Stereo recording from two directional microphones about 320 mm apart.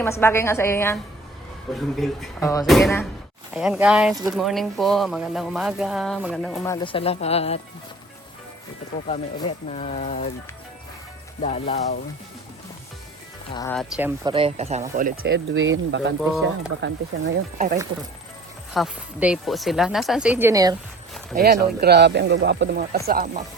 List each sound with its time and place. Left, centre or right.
0.0 s a woman's voice: centre
2.0 s speech: centre
6.7 s speech: centre
9.0 s speech: centre
11.4 s speech: centre
13.5 s a woman's voice: centre
13.7 s speech: centre
14.3 s speech: centre
18.7 s speech: centre
21.3 s speech: right